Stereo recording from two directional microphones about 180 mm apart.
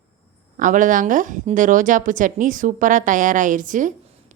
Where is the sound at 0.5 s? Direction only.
45° right (ahead or behind).